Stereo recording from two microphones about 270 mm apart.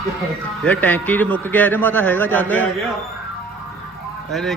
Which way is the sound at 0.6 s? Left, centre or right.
Centre.